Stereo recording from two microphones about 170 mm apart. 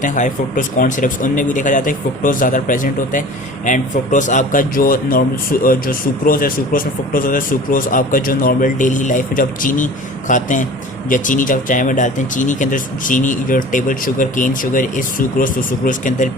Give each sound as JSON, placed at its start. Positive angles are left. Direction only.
{"t": 0.0, "sound": "speech", "side_deg": 50}